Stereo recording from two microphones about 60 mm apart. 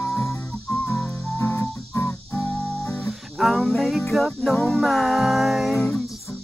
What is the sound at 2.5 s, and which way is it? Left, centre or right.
Guitar, left.